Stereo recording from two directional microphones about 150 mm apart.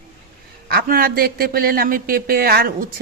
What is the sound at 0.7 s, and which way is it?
A woman's voice, 75° right (ahead or behind).